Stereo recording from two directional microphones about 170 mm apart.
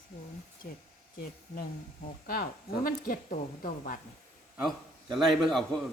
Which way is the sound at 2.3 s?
60° left (ahead or behind).